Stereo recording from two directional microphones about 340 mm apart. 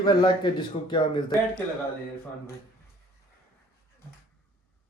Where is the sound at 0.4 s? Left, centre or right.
Centre.